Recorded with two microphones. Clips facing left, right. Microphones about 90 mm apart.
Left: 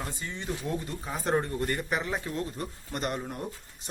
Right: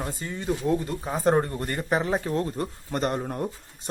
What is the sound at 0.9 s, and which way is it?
Speech, 40° right (ahead or behind).